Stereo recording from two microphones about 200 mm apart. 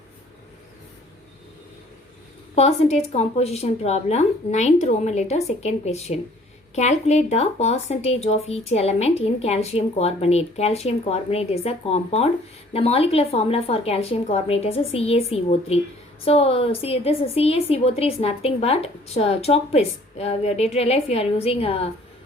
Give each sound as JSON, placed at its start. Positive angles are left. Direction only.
{"t": 2.6, "sound": "a woman's voice", "side_deg": 30}